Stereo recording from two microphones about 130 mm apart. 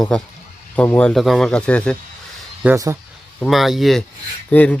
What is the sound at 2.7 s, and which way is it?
Speech, 25° right (ahead or behind).